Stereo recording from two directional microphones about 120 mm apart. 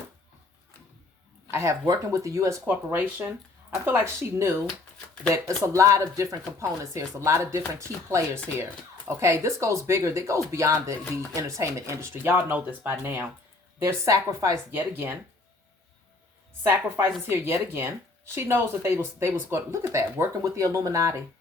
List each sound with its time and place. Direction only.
1.5 s speech: 20° right (ahead or behind)
2.6 s speech: 15° right (ahead or behind)
14.8 s speech: 15° right (ahead or behind)
17.2 s speech: 20° right (ahead or behind)